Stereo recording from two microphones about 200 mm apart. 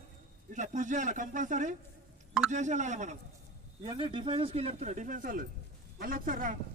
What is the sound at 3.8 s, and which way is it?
A man's voice, 25° right (ahead or behind).